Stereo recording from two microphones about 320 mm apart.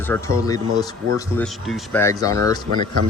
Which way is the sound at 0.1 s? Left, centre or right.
Centre.